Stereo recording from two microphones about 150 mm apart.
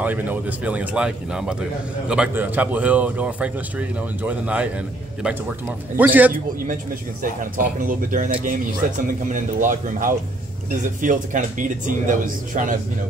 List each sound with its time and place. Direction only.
0.0 s speech: 10° right (ahead or behind)
5.9 s speech: 10° right (ahead or behind)
7.5 s speech: 65° right (ahead or behind)